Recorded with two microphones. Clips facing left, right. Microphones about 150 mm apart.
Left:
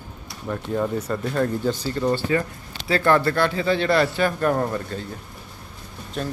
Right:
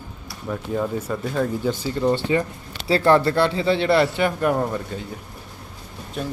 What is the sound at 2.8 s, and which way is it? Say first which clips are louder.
A man's voice: right 2 dB; 30° right (ahead or behind).